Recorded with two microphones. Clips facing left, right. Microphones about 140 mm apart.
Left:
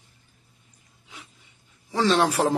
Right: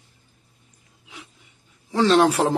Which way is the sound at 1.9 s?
Centre (ahead or behind).